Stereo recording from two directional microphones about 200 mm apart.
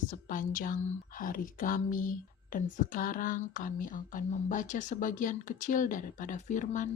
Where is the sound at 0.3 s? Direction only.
40° left (ahead or behind).